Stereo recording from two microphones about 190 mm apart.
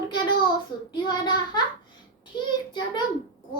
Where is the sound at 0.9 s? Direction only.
25° left (ahead or behind).